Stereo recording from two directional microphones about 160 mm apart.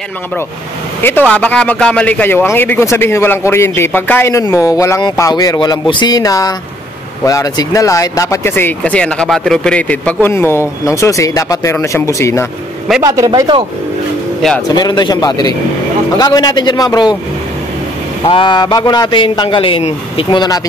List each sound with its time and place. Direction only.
1.3 s a man's voice: 5° left (ahead or behind)
13.0 s a man's voice: 20° right (ahead or behind)
14.4 s speech: centre (ahead or behind)
14.8 s a man's voice: 25° left (ahead or behind)
18.2 s a man's voice: 35° left (ahead or behind)